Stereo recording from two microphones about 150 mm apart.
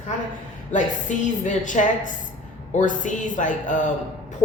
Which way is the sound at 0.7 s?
55° left (ahead or behind).